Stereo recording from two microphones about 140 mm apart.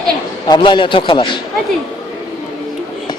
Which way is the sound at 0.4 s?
30° left (ahead or behind).